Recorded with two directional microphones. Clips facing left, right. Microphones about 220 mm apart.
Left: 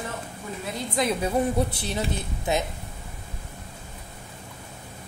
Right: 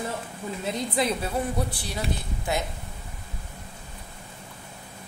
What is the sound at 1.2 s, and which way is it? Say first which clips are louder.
A woman's voice: left 4 dB; 20° left (ahead or behind).